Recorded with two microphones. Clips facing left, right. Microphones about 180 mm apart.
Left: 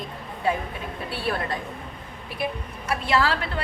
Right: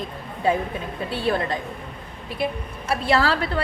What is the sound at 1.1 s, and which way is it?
Speech, 20° right (ahead or behind).